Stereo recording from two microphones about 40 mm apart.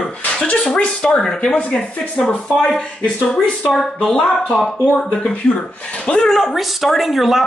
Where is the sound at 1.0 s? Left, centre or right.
Centre.